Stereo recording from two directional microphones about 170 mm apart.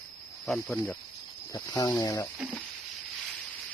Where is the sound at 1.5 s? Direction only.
20° left (ahead or behind).